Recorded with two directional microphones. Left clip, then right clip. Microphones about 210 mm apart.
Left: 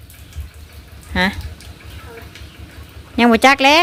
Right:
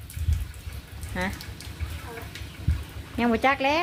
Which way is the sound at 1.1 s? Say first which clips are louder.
Left 13 dB; 50° left (ahead or behind).